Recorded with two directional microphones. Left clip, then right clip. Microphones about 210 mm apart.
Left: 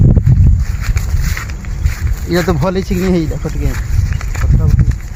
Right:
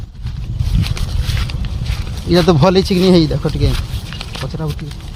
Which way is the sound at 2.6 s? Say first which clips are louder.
Right 4 dB; 55° right (ahead or behind).